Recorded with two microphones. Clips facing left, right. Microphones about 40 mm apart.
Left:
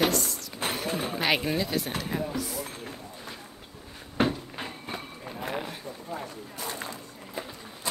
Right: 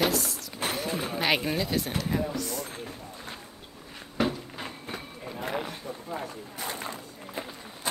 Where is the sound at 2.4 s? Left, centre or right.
Centre.